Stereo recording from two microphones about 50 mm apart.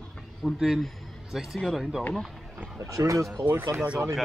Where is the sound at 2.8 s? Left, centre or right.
Right.